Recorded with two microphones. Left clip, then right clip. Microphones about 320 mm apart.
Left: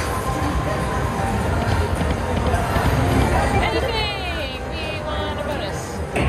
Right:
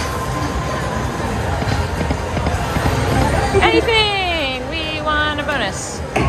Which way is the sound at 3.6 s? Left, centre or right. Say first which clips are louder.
Right 8 dB; right.